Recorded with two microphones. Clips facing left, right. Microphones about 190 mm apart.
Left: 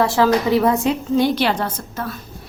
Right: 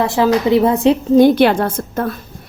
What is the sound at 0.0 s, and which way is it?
Speech, 20° right (ahead or behind).